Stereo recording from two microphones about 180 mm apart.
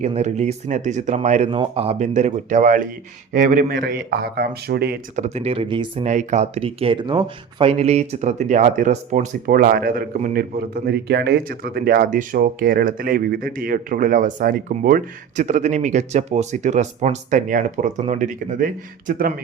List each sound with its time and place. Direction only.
0.0 s speech: 40° right (ahead or behind)
1.5 s speech: 30° right (ahead or behind); by 4.9 s 60° right (ahead or behind)
5.1 s speech: 40° right (ahead or behind)
6.1 s speech: 40° right (ahead or behind)